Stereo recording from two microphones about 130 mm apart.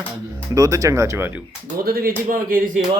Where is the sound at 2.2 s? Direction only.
90° right.